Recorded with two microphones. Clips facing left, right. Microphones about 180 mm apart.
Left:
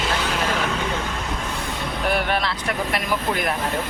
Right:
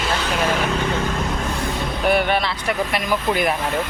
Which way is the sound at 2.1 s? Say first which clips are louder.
Right 3 dB; centre (ahead or behind).